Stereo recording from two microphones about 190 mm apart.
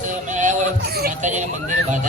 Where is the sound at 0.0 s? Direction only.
40° right (ahead or behind).